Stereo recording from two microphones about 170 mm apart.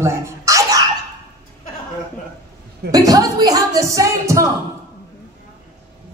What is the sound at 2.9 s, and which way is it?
Speech, 20° right (ahead or behind).